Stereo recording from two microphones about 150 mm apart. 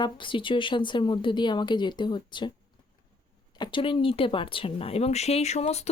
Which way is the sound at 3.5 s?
30° left (ahead or behind).